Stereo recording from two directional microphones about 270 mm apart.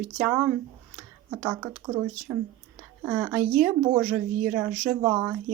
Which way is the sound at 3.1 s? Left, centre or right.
Centre.